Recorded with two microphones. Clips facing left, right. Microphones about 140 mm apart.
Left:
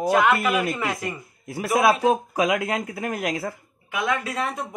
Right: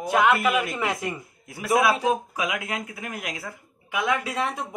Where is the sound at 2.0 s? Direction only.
35° left (ahead or behind).